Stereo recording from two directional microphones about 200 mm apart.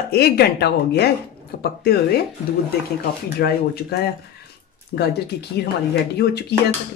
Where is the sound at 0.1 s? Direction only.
55° left (ahead or behind).